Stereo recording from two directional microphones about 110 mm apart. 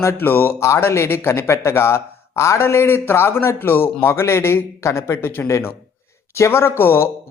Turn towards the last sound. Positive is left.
turn(degrees=20)  # may be behind; listen again after turning